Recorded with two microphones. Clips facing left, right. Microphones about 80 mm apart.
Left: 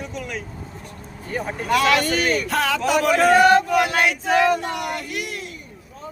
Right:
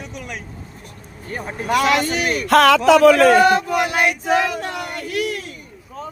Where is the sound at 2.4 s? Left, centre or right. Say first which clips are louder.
Right 10 dB; right.